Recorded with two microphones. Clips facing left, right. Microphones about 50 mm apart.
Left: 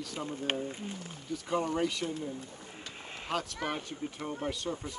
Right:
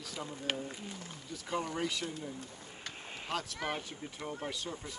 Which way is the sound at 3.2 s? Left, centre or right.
Centre.